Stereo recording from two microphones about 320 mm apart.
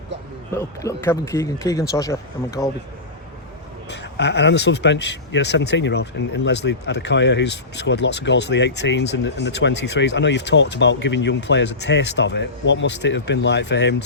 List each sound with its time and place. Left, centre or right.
0.5 s speech: centre
3.8 s speech: left